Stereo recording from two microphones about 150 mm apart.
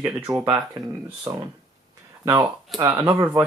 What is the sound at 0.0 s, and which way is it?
Speech, 5° right (ahead or behind).